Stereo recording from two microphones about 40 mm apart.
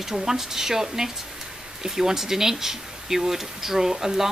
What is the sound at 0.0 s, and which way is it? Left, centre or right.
Speech, centre.